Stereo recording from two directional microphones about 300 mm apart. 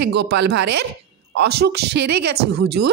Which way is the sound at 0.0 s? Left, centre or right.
Right.